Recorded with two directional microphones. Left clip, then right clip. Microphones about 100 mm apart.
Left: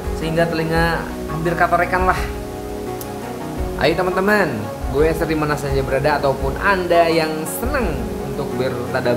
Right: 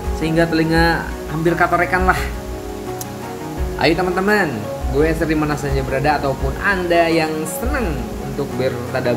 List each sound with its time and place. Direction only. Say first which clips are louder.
0.2 s speech: right 2 dB; 5° right (ahead or behind)
3.8 s a man's voice: even; centre (ahead or behind)
8.5 s a man's voice: right 1 dB; centre (ahead or behind)